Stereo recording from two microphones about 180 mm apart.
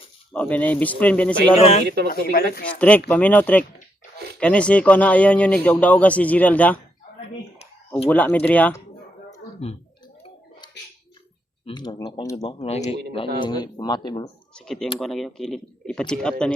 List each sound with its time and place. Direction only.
0.3 s speech: 10° left (ahead or behind)
1.5 s speech: 35° left (ahead or behind)
2.3 s speech: 55° left (ahead or behind)
2.7 s speech: 5° left (ahead or behind)
8.1 s speech: 10° left (ahead or behind)
11.6 s speech: 25° left (ahead or behind)
12.4 s speech: 35° left (ahead or behind)
13.1 s speech: 25° left (ahead or behind)
14.5 s speech: 5° left (ahead or behind)